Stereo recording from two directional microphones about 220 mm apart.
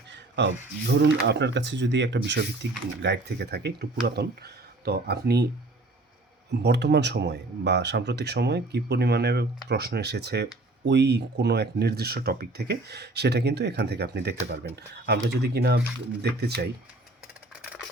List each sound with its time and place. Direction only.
0.1 s speech: 55° right (ahead or behind)
6.6 s speech: 50° right (ahead or behind)